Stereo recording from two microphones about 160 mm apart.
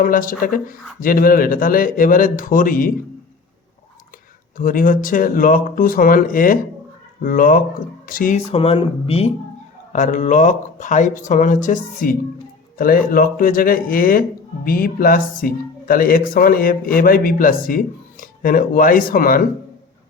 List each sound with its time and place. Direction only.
0.0 s a man's voice: 60° left (ahead or behind)
4.5 s a man's voice: 60° left (ahead or behind)
8.5 s speech: 35° left (ahead or behind)
9.9 s a man's voice: 50° left (ahead or behind)